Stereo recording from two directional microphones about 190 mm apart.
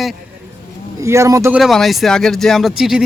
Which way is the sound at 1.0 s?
15° right (ahead or behind).